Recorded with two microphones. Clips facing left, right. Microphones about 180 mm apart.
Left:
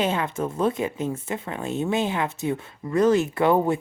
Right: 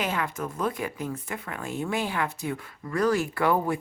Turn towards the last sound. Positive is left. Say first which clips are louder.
# left 5 dB
turn(degrees=25)  # may be behind; listen again after turning